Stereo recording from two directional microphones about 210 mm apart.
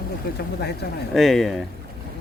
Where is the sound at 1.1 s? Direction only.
Centre (ahead or behind).